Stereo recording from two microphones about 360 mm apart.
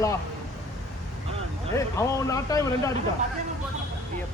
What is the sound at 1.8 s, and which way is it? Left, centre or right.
A man's voice, centre.